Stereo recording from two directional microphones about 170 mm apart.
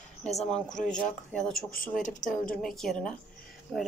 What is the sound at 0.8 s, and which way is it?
Speech, 5° left (ahead or behind).